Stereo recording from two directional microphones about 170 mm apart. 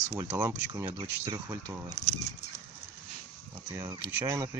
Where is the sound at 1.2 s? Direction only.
20° right (ahead or behind).